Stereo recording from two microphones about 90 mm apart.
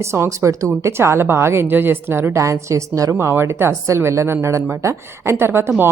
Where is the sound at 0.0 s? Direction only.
30° right (ahead or behind).